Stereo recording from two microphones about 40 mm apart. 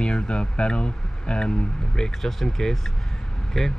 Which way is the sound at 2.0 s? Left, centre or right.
Centre.